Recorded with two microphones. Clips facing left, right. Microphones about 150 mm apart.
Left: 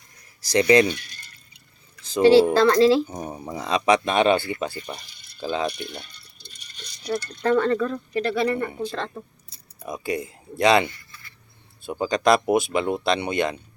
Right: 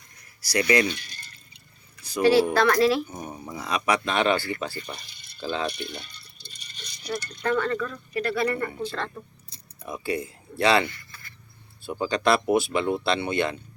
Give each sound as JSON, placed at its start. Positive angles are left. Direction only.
{"t": 0.5, "sound": "speech", "side_deg": 25}
{"t": 2.0, "sound": "speech", "side_deg": 25}
{"t": 7.0, "sound": "speech", "side_deg": 30}